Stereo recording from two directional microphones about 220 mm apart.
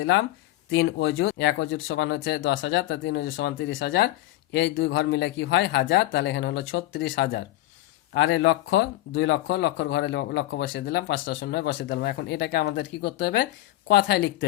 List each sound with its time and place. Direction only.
0.0 s speech: 60° left (ahead or behind)